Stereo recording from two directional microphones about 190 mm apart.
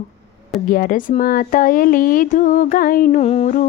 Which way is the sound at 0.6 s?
45° left (ahead or behind).